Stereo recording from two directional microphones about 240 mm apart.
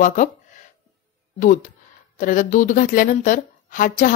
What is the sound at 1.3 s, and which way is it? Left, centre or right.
A woman's voice, left.